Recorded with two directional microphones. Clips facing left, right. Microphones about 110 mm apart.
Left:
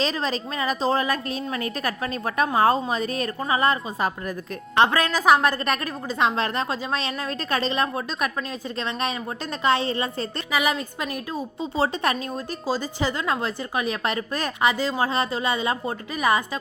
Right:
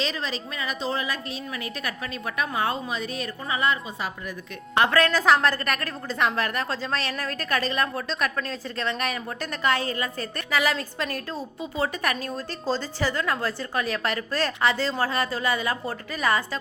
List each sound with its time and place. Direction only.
0.0 s a woman's voice: 40° left (ahead or behind)
4.8 s a woman's voice: 15° left (ahead or behind)
12.6 s a woman's voice: 10° left (ahead or behind)